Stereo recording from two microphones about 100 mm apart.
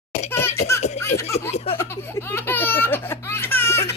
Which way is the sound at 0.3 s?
25° left (ahead or behind).